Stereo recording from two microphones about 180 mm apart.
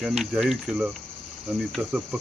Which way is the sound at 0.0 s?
Centre (ahead or behind).